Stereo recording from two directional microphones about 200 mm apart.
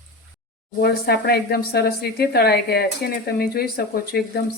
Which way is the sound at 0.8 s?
55° left (ahead or behind).